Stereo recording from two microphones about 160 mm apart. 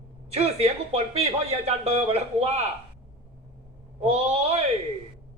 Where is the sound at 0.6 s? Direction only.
40° right (ahead or behind).